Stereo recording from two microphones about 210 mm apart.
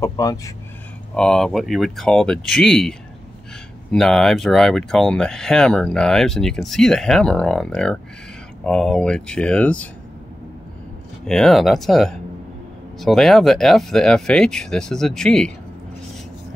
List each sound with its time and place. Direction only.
0.0 s speech: 15° left (ahead or behind)
1.1 s speech: 5° left (ahead or behind)
11.2 s speech: 5° left (ahead or behind)